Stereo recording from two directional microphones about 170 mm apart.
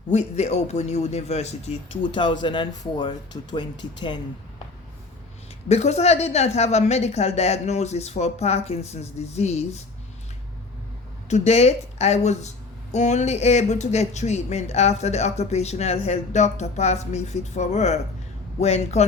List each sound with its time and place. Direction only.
0.1 s a woman's voice: 40° left (ahead or behind); by 3.7 s 25° left (ahead or behind)
5.6 s a woman's voice: 40° left (ahead or behind)
11.3 s a woman's voice: 40° left (ahead or behind)